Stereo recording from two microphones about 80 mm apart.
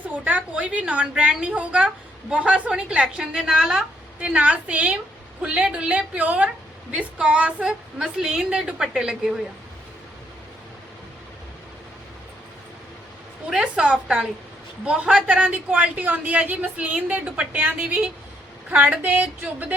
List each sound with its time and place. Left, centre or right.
0.3 s a woman's voice: centre
13.5 s a woman's voice: centre